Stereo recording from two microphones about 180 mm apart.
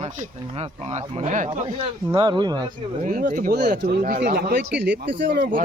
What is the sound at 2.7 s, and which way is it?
Speech, 50° right (ahead or behind).